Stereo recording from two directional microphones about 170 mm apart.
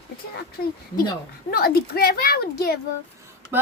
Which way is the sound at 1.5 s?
60° left (ahead or behind).